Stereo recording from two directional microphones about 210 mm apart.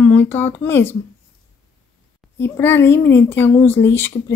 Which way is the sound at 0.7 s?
10° left (ahead or behind).